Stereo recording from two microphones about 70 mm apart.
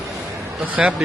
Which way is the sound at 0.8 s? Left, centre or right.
Centre.